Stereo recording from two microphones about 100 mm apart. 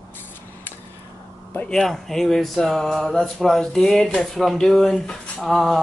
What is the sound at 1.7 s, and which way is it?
Speech, 5° left (ahead or behind).